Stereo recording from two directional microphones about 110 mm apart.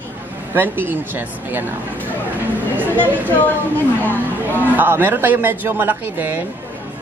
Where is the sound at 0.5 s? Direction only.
20° right (ahead or behind).